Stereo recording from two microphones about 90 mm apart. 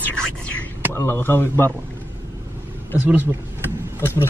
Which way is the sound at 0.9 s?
25° left (ahead or behind).